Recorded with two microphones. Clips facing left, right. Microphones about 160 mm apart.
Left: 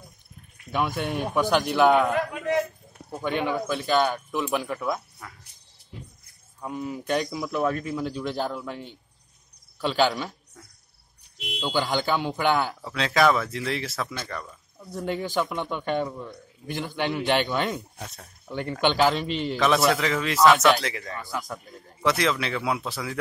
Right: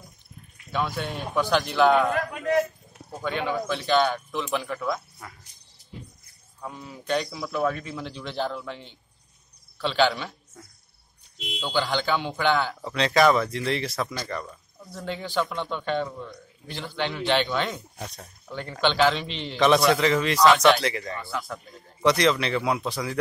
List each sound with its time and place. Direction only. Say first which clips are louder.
0.7 s a man's voice: left 2 dB; 15° left (ahead or behind)
3.2 s a man's voice: left 1 dB; 15° left (ahead or behind)
6.6 s a man's voice: left 7 dB; 10° left (ahead or behind)
9.8 s a man's voice: even; 10° left (ahead or behind)
11.3 s a sound: even; 60° left (ahead or behind)
11.6 s a man's voice: left 1 dB; 15° left (ahead or behind)
14.9 s a man's voice: left 4 dB; 10° left (ahead or behind)
21.3 s a man's voice: left 2 dB; 15° left (ahead or behind)
22.0 s a man's voice: right 3 dB; 5° left (ahead or behind)